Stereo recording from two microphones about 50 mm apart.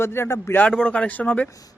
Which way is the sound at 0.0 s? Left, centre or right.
Left.